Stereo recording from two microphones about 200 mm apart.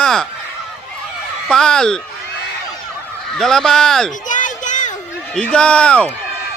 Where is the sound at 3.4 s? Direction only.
Centre (ahead or behind).